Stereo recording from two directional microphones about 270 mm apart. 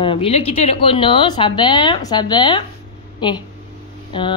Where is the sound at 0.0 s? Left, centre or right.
Centre.